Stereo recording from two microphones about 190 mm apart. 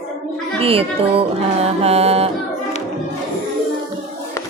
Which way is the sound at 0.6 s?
30° right (ahead or behind).